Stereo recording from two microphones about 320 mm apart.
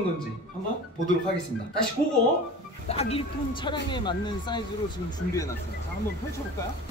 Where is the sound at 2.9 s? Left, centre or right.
Centre.